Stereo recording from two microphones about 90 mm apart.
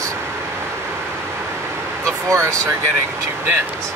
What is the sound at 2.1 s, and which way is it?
Speech, 35° right (ahead or behind).